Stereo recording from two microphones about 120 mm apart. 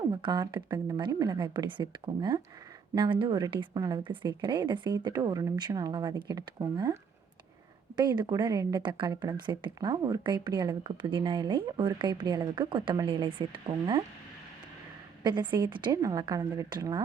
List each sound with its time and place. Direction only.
0.1 s speech: 35° right (ahead or behind)
15.2 s a woman's voice: 40° right (ahead or behind)